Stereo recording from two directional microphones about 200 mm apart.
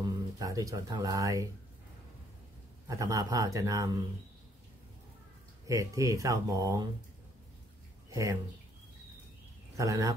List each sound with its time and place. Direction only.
0.0 s speech: 20° right (ahead or behind)
2.9 s speech: 15° right (ahead or behind)
5.7 s speech: 15° right (ahead or behind)
8.1 s speech: 15° right (ahead or behind)
9.8 s speech: 15° right (ahead or behind)